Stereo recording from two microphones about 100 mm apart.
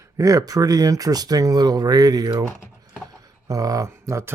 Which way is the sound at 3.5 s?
35° right (ahead or behind).